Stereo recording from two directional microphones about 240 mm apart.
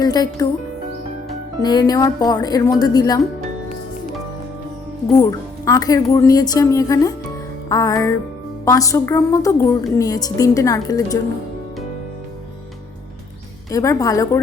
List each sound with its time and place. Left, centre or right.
0.0 s speech: centre
1.6 s speech: centre
5.1 s speech: centre
13.7 s speech: centre